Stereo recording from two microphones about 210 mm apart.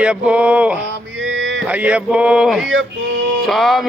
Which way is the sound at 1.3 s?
60° right (ahead or behind).